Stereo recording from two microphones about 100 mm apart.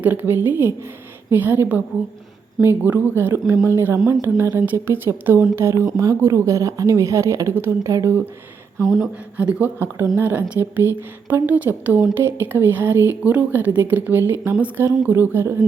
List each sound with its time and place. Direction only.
0.0 s a woman's voice: 20° right (ahead or behind)
9.4 s a woman's voice: 15° right (ahead or behind)